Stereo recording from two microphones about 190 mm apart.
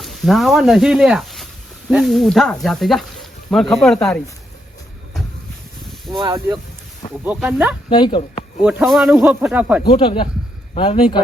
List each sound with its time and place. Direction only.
0.0 s speech: centre (ahead or behind)
6.1 s speech: 20° right (ahead or behind)
7.3 s speech: 5° right (ahead or behind)
7.9 s speech: 25° left (ahead or behind)
8.6 s speech: centre (ahead or behind)
9.9 s speech: 25° left (ahead or behind)